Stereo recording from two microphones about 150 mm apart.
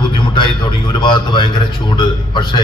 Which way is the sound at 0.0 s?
30° left (ahead or behind).